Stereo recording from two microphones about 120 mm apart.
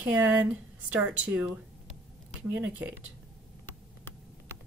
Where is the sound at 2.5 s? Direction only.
10° right (ahead or behind).